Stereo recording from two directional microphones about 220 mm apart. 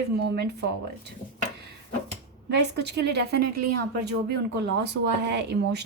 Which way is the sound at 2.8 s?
50° right (ahead or behind).